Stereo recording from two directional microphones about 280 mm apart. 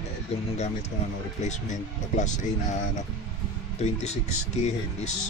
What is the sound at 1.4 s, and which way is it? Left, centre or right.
Speech, left.